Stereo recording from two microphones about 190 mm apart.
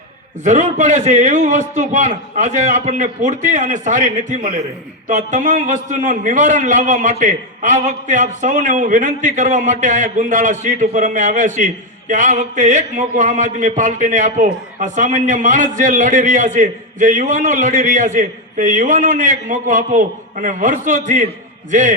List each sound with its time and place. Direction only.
0.4 s a man's voice: 40° right (ahead or behind)